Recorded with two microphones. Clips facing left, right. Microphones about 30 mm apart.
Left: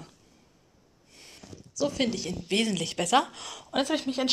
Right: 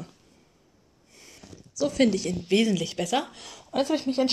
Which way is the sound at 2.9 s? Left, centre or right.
Left.